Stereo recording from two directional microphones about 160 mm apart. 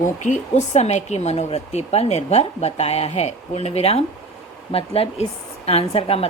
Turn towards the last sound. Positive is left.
turn(degrees=35)  # may be behind; listen again after turning